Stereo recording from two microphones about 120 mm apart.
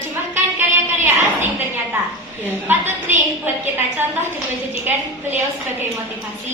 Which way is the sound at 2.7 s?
15° right (ahead or behind).